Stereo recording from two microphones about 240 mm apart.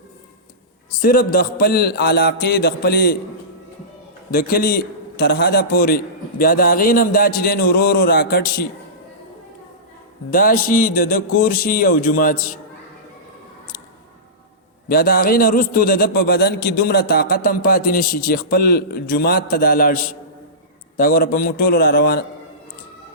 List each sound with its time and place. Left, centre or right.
1.0 s a man's voice: left
4.3 s a man's voice: left
10.3 s a man's voice: left
14.8 s a man's voice: left